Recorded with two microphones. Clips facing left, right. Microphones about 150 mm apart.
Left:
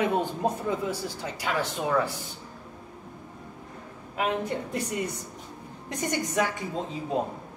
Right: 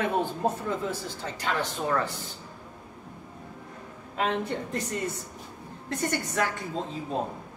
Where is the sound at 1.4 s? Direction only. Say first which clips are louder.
Left 1 dB; 10° left (ahead or behind).